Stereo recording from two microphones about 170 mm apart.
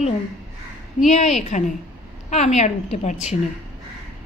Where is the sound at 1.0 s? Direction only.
40° left (ahead or behind).